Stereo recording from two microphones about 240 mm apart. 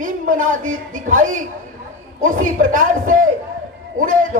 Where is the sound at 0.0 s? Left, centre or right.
Right.